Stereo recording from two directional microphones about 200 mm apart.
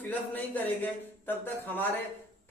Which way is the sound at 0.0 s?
10° left (ahead or behind).